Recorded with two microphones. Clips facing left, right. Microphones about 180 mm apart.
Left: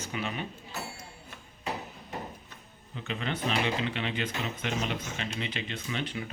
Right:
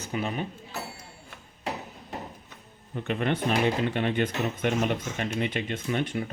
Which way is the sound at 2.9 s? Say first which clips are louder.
Right 7 dB; 55° right (ahead or behind).